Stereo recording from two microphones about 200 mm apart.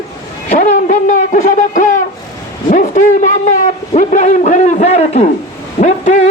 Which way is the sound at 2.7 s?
40° left (ahead or behind).